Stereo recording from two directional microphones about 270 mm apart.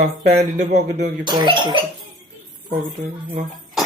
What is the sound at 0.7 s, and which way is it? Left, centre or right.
Speech, right.